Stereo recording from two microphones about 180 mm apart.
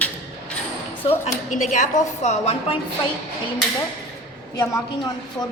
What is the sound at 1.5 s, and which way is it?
A woman's voice, 45° left (ahead or behind).